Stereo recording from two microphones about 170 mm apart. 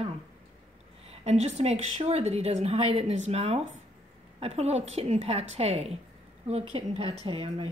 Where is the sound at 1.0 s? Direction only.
40° right (ahead or behind).